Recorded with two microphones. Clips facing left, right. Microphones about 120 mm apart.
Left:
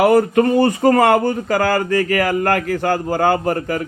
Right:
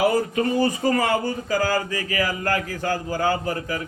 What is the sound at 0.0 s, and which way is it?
A man's voice, 60° left (ahead or behind).